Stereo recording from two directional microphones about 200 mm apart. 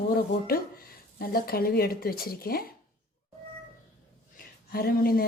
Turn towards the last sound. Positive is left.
turn(degrees=50)  # may be behind; listen again after turning